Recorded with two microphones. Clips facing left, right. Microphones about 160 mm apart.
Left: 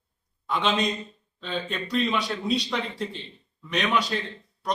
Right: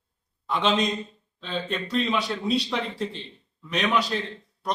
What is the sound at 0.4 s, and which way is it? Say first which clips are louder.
A man's voice: right 1 dB; centre (ahead or behind).